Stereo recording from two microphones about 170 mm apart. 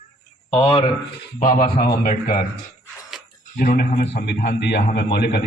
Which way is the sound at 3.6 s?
55° left (ahead or behind).